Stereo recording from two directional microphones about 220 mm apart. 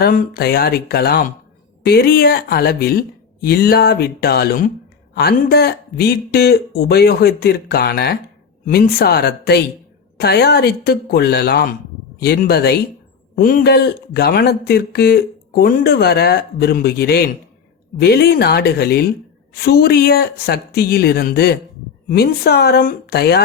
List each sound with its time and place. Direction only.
0.0 s speech: 40° left (ahead or behind)